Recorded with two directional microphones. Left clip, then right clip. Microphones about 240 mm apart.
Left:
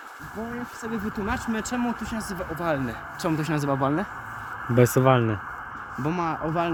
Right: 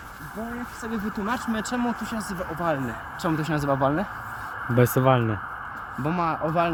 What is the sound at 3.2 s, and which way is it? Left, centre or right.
Speech, centre.